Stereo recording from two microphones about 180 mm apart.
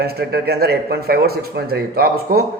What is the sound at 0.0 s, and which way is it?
A man's voice, 60° right (ahead or behind).